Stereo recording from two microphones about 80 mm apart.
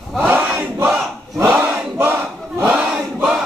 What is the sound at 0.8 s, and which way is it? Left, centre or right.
Battle cry, right.